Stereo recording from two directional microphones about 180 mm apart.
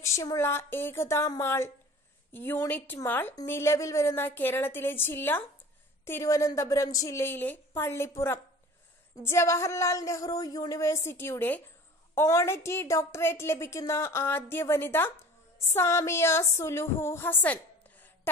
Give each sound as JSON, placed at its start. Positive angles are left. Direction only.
{"t": 0.0, "sound": "a woman's voice", "side_deg": 15}